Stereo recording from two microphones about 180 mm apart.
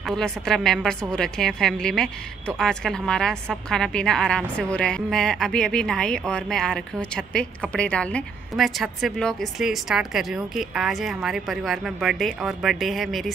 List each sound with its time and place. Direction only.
0.0 s a woman's voice: centre (ahead or behind)